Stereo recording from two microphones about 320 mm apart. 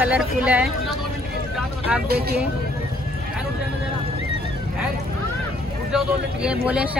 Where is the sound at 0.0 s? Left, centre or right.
Centre.